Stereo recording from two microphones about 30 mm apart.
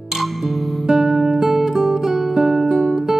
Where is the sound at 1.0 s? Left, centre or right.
Centre.